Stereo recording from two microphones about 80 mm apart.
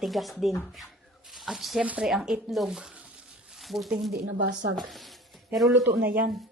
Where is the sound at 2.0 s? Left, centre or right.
Centre.